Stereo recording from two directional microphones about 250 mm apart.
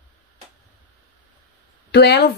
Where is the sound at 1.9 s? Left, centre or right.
Left.